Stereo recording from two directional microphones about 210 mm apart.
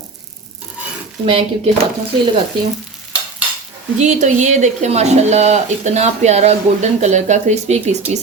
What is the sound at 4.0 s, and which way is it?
Speech, 35° right (ahead or behind).